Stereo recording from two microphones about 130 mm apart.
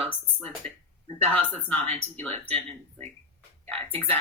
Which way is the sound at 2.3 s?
55° right (ahead or behind).